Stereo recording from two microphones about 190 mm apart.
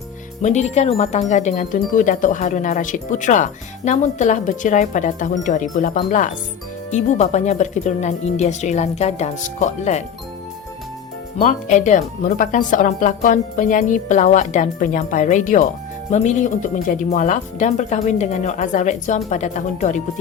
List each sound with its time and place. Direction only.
0.4 s speech: 35° left (ahead or behind)
11.3 s speech: 40° left (ahead or behind)